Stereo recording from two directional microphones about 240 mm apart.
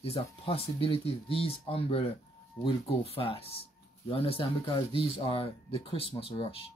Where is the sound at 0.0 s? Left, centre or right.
Left.